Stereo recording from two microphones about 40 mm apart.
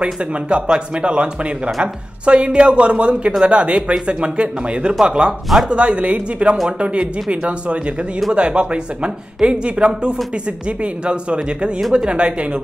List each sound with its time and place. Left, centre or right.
0.0 s speech: right